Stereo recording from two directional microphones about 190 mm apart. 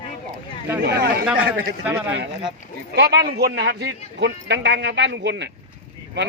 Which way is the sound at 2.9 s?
60° right (ahead or behind).